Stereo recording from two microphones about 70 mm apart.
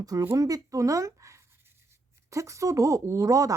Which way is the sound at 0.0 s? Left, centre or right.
Right.